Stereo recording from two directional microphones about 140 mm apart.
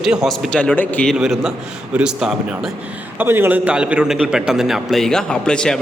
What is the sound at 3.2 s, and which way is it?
A man's voice, 15° right (ahead or behind).